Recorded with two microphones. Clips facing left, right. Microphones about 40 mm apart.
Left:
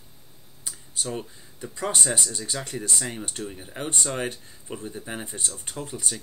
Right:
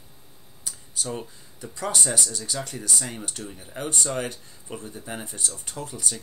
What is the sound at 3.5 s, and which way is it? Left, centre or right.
Speech, centre.